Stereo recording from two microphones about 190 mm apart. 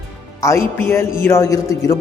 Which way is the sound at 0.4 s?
15° left (ahead or behind).